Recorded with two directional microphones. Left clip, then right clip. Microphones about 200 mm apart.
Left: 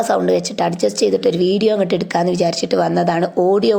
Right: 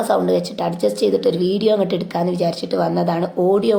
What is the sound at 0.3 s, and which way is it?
Speech, 25° left (ahead or behind).